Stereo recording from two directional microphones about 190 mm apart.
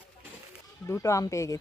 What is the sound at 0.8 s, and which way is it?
Speech, 15° left (ahead or behind).